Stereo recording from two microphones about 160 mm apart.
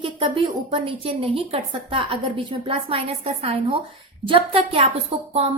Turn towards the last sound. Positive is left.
turn(degrees=-40)  # may be behind; listen again after turning